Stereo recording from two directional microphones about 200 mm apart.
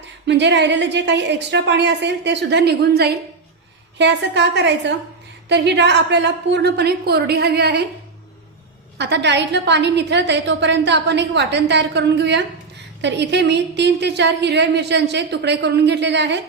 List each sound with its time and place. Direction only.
0.3 s a woman's voice: 60° right (ahead or behind)
9.0 s a woman's voice: 60° right (ahead or behind)